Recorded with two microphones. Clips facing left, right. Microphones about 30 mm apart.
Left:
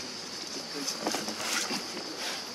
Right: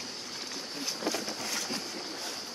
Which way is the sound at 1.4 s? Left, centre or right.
Left.